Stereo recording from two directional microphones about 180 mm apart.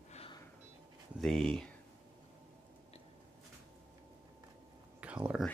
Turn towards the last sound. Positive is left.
turn(degrees=-5)  # may be behind; listen again after turning